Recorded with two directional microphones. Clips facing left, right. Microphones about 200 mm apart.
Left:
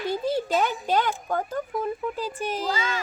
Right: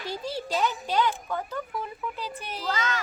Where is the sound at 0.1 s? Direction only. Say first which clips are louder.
Left 5 dB; 50° left (ahead or behind).